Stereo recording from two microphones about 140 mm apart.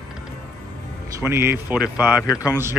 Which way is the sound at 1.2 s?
15° right (ahead or behind).